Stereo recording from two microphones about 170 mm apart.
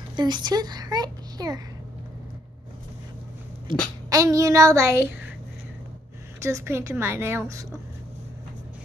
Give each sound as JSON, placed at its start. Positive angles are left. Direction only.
{"t": 0.1, "sound": "a child's voice", "side_deg": -25}
{"t": 3.7, "sound": "child singing", "side_deg": -30}
{"t": 6.4, "sound": "a woman's voice", "side_deg": -15}